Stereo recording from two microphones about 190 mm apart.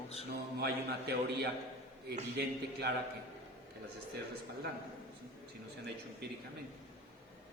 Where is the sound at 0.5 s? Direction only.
55° right (ahead or behind).